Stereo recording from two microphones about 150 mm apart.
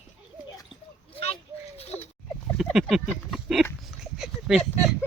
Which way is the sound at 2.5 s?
Centre (ahead or behind).